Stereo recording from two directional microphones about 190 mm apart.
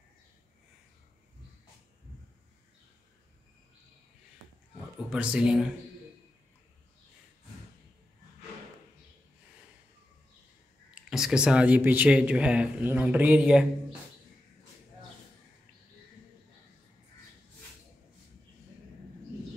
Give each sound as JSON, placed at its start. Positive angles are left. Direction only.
{"t": 5.1, "sound": "speech", "side_deg": -5}
{"t": 11.1, "sound": "speech", "side_deg": -5}